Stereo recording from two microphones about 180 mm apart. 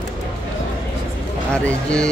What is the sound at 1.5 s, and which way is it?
Speech, 5° left (ahead or behind).